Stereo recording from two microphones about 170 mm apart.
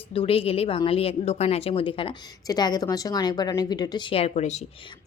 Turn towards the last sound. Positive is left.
turn(degrees=40)  # may be behind; listen again after turning